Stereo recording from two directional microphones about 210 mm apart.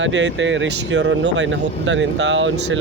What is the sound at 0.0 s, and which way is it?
Speech, 60° right (ahead or behind).